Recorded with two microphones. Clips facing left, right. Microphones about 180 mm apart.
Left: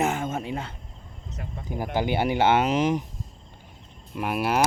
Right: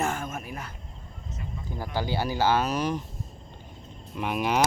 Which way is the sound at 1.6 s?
15° left (ahead or behind).